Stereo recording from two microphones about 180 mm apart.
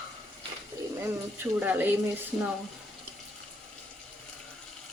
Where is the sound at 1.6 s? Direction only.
10° right (ahead or behind).